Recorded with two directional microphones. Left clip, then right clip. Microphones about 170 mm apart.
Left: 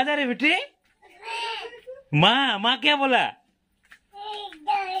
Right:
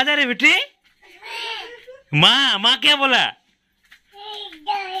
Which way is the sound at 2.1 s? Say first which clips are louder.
Right 5 dB; 5° left (ahead or behind).